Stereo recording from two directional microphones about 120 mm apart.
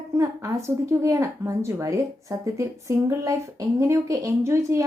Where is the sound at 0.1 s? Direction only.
25° right (ahead or behind).